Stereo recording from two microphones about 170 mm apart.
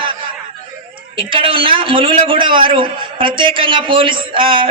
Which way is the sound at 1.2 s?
30° right (ahead or behind).